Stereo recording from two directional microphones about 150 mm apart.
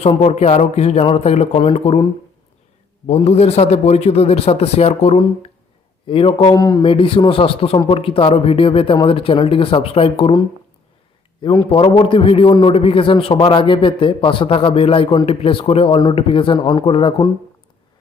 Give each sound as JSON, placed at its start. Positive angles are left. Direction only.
{"t": 0.0, "sound": "speech", "side_deg": 45}
{"t": 3.2, "sound": "speech", "side_deg": 45}
{"t": 6.8, "sound": "a man's voice", "side_deg": 35}
{"t": 11.7, "sound": "a man's voice", "side_deg": 35}